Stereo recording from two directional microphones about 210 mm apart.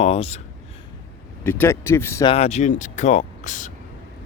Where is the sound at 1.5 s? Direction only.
10° left (ahead or behind).